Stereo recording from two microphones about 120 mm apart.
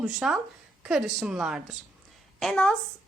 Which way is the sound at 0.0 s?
5° right (ahead or behind).